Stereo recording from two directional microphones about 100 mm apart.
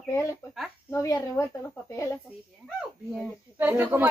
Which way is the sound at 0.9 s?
30° left (ahead or behind).